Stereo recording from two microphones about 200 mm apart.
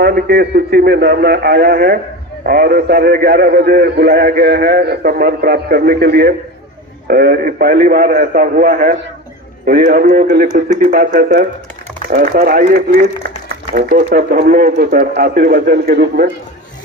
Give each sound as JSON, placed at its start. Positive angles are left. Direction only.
{"t": 0.0, "sound": "a man's voice", "side_deg": -50}